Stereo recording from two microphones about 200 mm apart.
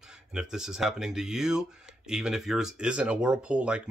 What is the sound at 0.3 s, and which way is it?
Speech, 5° right (ahead or behind).